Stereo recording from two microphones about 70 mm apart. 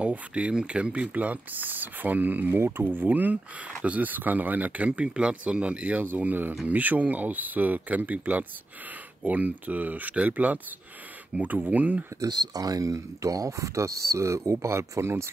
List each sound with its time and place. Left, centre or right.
0.0 s speech: centre
12.3 s speech: right